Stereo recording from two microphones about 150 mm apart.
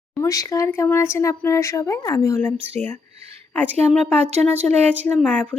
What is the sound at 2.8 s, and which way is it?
Speech, 10° left (ahead or behind).